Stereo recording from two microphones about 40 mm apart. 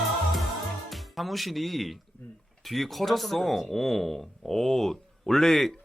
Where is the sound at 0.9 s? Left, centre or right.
Centre.